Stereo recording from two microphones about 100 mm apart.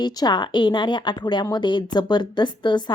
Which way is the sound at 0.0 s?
45° left (ahead or behind).